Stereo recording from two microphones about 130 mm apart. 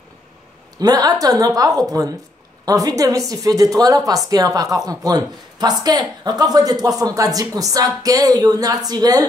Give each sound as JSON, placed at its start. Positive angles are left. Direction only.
{"t": 0.7, "sound": "a woman's voice", "side_deg": -30}